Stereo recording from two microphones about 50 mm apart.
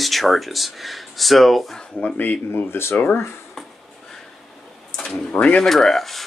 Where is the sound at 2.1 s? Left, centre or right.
Left.